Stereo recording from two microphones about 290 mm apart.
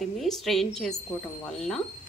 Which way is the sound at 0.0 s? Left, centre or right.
Centre.